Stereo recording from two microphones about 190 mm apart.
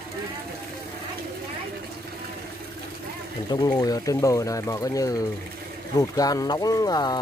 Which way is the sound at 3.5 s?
20° left (ahead or behind).